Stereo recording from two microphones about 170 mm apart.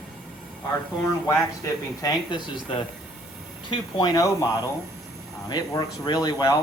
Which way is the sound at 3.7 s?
25° left (ahead or behind).